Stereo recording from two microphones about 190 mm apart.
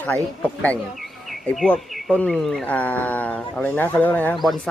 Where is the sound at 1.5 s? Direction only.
5° left (ahead or behind).